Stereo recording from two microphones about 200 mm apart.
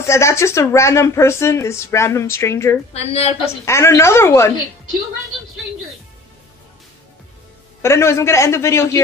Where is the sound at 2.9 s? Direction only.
30° left (ahead or behind).